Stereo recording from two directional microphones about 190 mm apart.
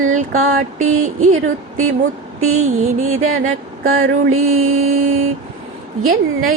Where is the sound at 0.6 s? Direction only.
40° right (ahead or behind).